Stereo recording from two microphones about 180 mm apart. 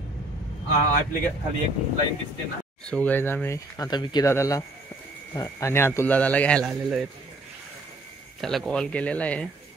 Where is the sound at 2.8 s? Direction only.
5° left (ahead or behind).